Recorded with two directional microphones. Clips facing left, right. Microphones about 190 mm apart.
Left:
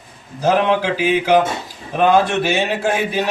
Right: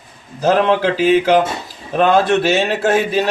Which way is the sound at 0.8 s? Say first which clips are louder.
Right 4 dB; 10° left (ahead or behind).